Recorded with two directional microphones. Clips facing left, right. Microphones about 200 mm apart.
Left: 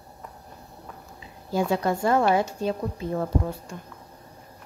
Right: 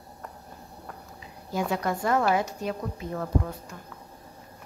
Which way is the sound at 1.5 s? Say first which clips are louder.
Left 4 dB; 30° left (ahead or behind).